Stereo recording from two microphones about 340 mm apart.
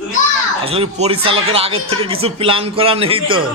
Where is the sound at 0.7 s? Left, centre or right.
Centre.